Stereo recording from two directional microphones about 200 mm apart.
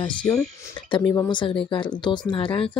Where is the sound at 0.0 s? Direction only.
25° left (ahead or behind).